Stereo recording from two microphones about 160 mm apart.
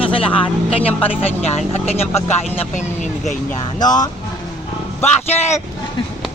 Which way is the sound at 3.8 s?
25° left (ahead or behind).